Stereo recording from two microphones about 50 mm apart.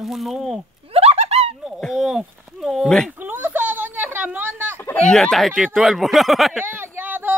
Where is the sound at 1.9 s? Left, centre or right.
Centre.